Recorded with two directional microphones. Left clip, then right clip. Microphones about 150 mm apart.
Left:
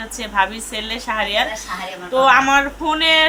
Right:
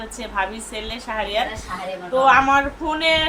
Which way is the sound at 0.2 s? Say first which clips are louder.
Left 6 dB; 15° left (ahead or behind).